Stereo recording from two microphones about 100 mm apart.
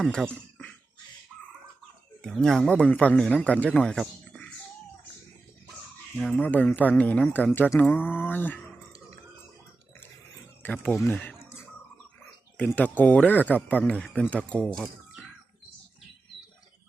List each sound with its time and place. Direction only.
0.0 s speech: 5° left (ahead or behind)
2.2 s speech: 5° left (ahead or behind)
6.1 s speech: 10° left (ahead or behind)
7.8 s a sound: 15° left (ahead or behind)
10.6 s speech: 15° left (ahead or behind)
13.0 s speech: 15° left (ahead or behind)